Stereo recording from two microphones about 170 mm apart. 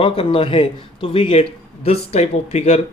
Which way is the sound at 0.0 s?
35° left (ahead or behind).